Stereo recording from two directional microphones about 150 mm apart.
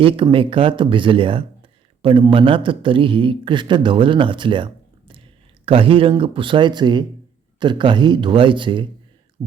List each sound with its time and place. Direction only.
0.0 s a man's voice: 35° right (ahead or behind)